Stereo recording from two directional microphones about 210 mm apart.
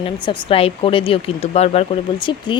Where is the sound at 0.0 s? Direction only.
25° left (ahead or behind).